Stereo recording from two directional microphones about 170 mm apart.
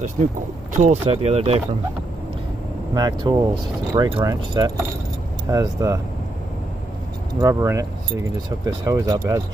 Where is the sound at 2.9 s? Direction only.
25° right (ahead or behind).